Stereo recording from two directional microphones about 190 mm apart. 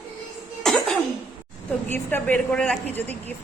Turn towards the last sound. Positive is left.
turn(degrees=10)  # may be behind; listen again after turning